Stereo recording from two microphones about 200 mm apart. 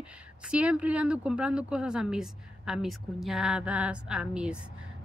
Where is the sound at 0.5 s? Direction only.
5° right (ahead or behind).